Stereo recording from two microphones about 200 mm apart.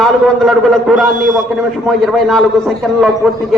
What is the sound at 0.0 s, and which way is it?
A man's voice, centre (ahead or behind).